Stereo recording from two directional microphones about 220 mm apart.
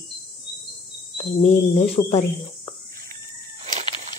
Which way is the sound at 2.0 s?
20° left (ahead or behind).